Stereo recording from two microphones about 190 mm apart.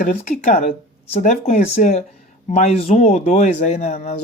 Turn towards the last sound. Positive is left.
turn(degrees=40)  # may be behind; listen again after turning